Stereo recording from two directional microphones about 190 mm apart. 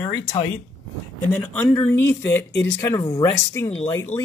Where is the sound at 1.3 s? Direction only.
10° left (ahead or behind).